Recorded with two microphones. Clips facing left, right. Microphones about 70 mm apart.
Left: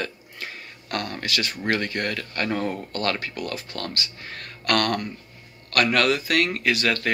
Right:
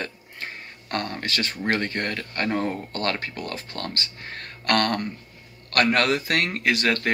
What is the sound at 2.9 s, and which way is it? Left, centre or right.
Speech, right.